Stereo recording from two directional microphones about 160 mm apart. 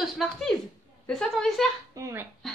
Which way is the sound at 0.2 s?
Centre (ahead or behind).